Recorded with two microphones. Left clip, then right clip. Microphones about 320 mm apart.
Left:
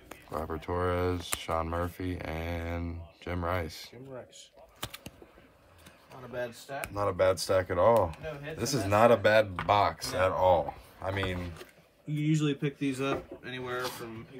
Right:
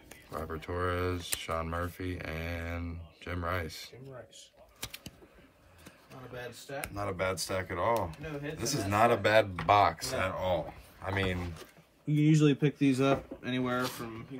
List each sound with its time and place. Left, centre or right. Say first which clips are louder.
0.1 s speech: left 3 dB; centre
6.3 s speech: left 5 dB; centre
11.1 s speech: even; centre
12.3 s speech: right 3 dB; centre